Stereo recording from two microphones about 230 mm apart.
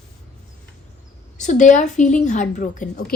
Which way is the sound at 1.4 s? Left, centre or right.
Left.